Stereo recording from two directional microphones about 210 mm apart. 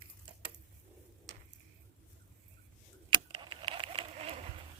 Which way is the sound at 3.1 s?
25° right (ahead or behind).